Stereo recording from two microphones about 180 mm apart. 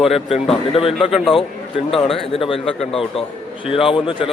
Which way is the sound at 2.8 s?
Centre (ahead or behind).